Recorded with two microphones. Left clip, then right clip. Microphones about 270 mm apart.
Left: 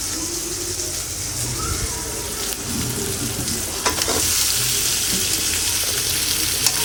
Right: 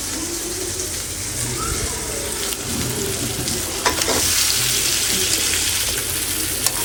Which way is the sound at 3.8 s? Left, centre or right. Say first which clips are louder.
Right 2 dB; centre.